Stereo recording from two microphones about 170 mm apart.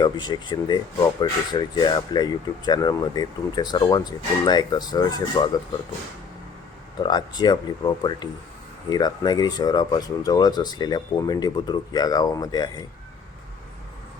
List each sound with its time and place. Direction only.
0.0 s speech: 25° left (ahead or behind)
7.0 s speech: 25° left (ahead or behind)